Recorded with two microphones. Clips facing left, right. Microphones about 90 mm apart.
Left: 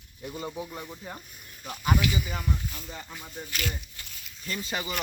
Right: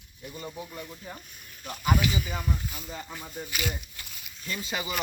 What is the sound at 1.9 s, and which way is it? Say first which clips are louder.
Speech: left 2 dB; 25° right (ahead or behind).